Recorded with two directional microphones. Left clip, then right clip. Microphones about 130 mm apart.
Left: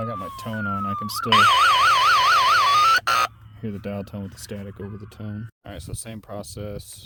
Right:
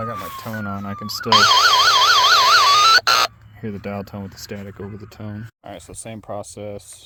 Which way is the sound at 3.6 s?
5° left (ahead or behind).